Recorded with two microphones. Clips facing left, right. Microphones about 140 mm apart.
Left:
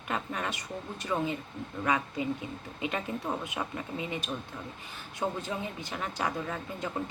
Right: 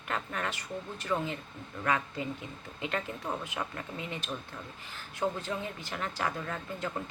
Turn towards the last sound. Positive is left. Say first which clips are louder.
# left 1 dB
turn(degrees=15)  # may be behind; listen again after turning